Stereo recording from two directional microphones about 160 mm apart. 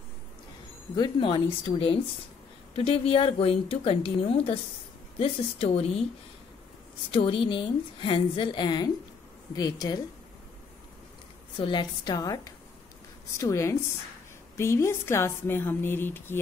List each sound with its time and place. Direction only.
0.9 s speech: 30° left (ahead or behind)
7.1 s a woman's voice: 30° left (ahead or behind)
11.5 s a woman's voice: 30° left (ahead or behind); by 16.3 s 15° left (ahead or behind)